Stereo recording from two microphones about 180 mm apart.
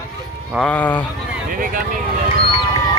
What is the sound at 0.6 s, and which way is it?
Speech, 10° left (ahead or behind).